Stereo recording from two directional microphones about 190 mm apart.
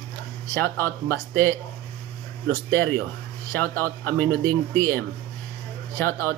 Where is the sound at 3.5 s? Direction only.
10° left (ahead or behind).